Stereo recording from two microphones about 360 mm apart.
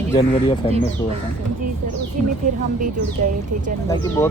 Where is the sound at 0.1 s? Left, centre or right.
Centre.